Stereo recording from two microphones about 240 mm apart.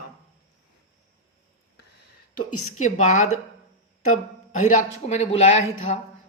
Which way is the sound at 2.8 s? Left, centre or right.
Left.